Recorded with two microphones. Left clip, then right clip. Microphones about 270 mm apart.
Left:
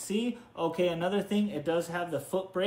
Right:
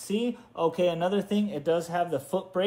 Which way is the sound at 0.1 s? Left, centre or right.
Centre.